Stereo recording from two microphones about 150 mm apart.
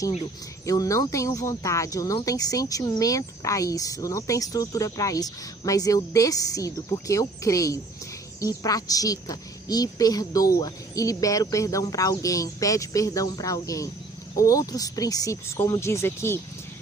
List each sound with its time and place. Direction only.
0.6 s speech: 20° left (ahead or behind)